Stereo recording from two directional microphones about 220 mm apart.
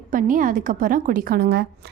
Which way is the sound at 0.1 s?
35° right (ahead or behind).